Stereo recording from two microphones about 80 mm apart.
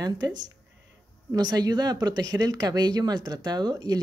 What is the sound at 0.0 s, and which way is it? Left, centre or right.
Speech, right.